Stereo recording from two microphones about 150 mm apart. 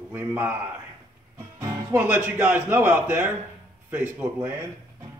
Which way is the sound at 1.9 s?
10° right (ahead or behind).